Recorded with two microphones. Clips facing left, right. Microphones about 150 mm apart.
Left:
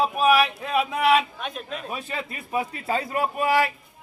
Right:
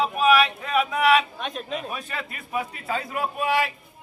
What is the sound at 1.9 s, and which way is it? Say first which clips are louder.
A man's voice: left 2 dB; 25° left (ahead or behind).